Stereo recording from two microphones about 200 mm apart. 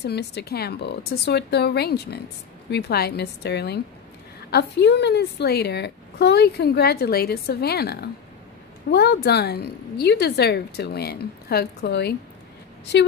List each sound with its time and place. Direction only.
0.0 s a woman's voice: 55° left (ahead or behind)